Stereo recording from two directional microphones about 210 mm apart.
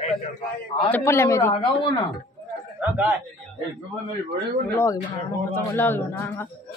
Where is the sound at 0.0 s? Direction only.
30° left (ahead or behind).